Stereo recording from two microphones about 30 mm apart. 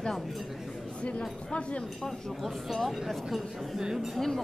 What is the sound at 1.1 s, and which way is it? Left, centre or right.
Speech, left.